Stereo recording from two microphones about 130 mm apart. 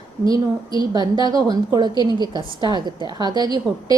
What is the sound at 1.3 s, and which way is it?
A woman's voice, 30° right (ahead or behind).